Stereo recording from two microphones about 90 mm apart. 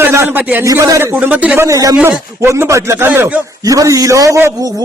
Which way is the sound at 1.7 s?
40° right (ahead or behind).